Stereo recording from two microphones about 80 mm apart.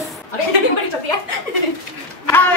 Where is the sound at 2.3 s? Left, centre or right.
Left.